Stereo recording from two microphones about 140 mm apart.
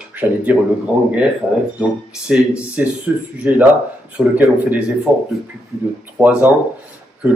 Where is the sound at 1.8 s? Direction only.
5° right (ahead or behind).